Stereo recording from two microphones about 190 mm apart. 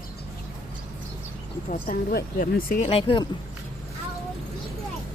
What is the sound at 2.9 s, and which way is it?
Speech, 30° left (ahead or behind).